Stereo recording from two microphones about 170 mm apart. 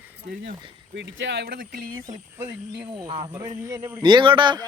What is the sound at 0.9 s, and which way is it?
Speech, 90° right.